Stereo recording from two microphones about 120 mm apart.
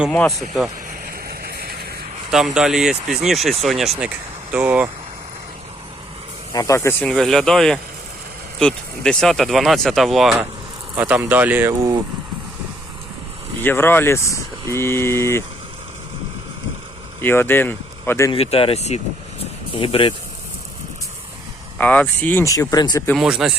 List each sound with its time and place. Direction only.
0.1 s speech: 5° left (ahead or behind)
2.6 s speech: 5° right (ahead or behind)
4.5 s speech: 15° right (ahead or behind)
6.5 s speech: 30° left (ahead or behind)
7.0 s speech: 5° left (ahead or behind)
10.9 s speech: 15° right (ahead or behind)
13.6 s speech: 15° left (ahead or behind)
17.2 s speech: 20° left (ahead or behind)
18.3 s speech: 50° left (ahead or behind)
21.8 s speech: 10° left (ahead or behind)
22.4 s speech: 30° left (ahead or behind)
23.1 s speech: 5° right (ahead or behind)